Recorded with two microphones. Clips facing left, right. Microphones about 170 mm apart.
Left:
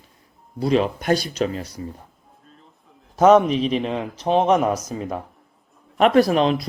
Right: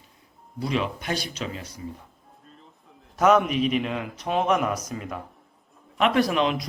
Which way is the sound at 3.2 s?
30° left (ahead or behind).